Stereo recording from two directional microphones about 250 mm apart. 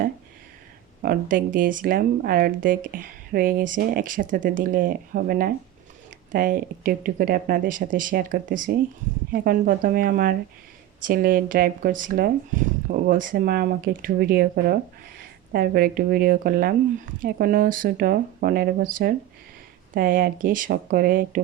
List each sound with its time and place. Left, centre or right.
1.0 s speech: right